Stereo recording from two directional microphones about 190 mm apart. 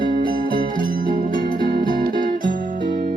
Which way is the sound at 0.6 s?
45° right (ahead or behind).